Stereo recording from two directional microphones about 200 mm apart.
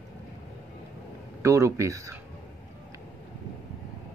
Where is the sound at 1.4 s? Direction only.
15° right (ahead or behind).